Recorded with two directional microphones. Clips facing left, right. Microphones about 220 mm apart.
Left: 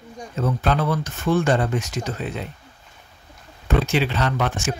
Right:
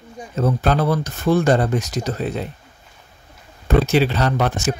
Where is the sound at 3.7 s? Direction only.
40° right (ahead or behind).